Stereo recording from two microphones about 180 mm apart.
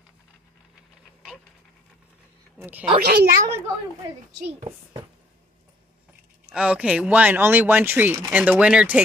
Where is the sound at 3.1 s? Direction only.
60° right (ahead or behind).